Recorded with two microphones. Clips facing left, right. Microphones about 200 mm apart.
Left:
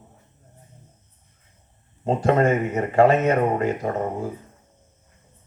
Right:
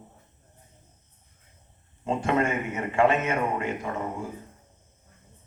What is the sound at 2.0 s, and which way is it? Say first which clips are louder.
Speech: left 6 dB; 40° left (ahead or behind).